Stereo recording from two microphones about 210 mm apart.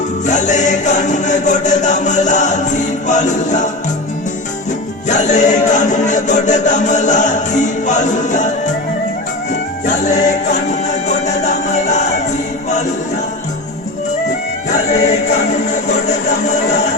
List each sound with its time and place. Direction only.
0.3 s music: 35° left (ahead or behind)
5.0 s music: 35° left (ahead or behind)
9.8 s music: 35° left (ahead or behind)
15.0 s music: 30° left (ahead or behind)